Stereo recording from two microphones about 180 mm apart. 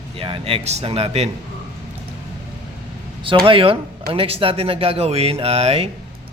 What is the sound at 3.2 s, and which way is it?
Speech, 30° right (ahead or behind).